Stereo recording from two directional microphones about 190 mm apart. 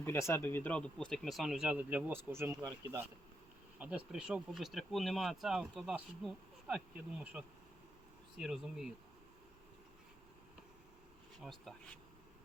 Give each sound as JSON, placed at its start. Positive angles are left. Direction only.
{"t": 0.0, "sound": "speech", "side_deg": 15}
{"t": 11.4, "sound": "speech", "side_deg": 0}